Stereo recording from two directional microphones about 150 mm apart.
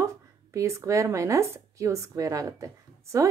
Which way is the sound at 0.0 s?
20° right (ahead or behind).